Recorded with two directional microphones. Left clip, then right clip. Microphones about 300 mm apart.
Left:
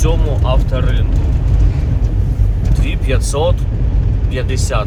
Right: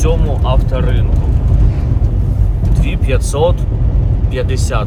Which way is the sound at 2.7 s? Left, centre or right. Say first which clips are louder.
Right 1 dB; centre.